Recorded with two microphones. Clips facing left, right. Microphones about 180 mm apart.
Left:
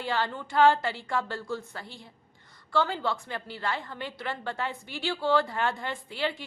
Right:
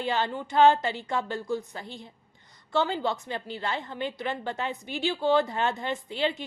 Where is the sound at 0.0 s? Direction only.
20° right (ahead or behind).